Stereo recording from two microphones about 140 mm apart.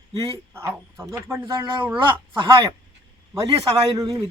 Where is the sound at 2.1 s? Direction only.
35° right (ahead or behind).